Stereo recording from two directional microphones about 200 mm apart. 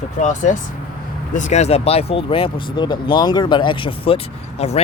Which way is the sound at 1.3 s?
35° left (ahead or behind).